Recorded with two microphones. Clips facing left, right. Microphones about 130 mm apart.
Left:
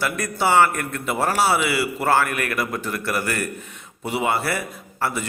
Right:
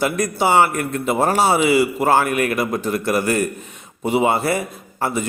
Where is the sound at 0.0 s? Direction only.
20° right (ahead or behind).